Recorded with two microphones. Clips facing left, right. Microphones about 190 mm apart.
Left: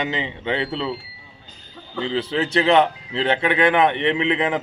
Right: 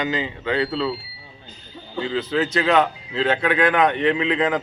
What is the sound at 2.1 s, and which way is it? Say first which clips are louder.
Speech: even; 25° left (ahead or behind).